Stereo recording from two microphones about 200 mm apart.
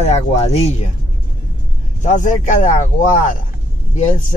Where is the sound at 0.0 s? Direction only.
35° left (ahead or behind).